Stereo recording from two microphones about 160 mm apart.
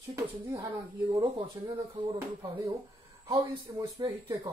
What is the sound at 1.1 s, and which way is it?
Speech, 30° right (ahead or behind).